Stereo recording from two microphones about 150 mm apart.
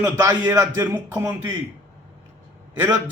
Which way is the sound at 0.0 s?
25° right (ahead or behind).